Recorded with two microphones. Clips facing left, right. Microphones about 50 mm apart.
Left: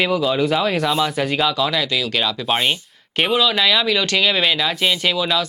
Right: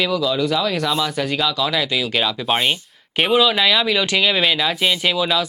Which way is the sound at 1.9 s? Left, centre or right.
Centre.